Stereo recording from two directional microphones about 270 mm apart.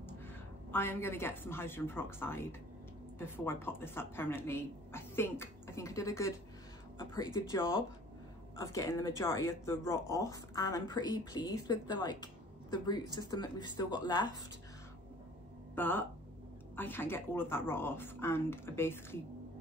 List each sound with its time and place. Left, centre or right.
0.7 s speech: centre
15.7 s speech: centre